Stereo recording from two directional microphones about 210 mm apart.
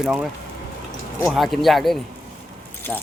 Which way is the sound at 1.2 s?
Centre (ahead or behind).